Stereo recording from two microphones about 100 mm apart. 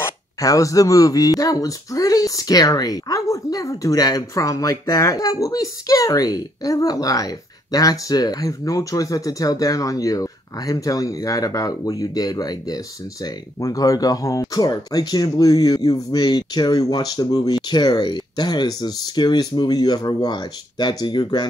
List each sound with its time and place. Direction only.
0.0 s speech: 35° left (ahead or behind)